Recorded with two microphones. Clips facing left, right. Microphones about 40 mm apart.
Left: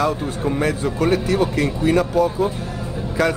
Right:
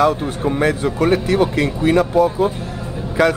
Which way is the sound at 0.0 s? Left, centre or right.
Right.